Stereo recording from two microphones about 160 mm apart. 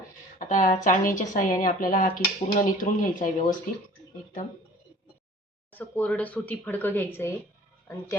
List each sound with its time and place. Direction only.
0.3 s a woman's voice: 50° left (ahead or behind)
5.7 s speech: 10° left (ahead or behind)